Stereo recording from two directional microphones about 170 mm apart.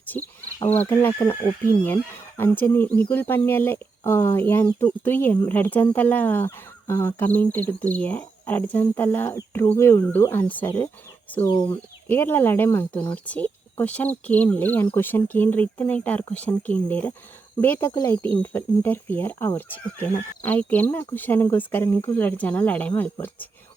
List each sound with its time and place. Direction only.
0.1 s speech: 10° left (ahead or behind)
11.4 s speech: 25° left (ahead or behind)
11.7 s speech: 10° left (ahead or behind)